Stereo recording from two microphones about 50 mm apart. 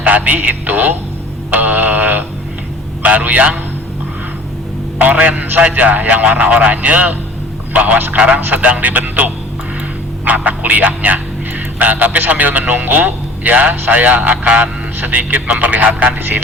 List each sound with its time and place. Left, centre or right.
0.0 s a man's voice: right
5.1 s a man's voice: right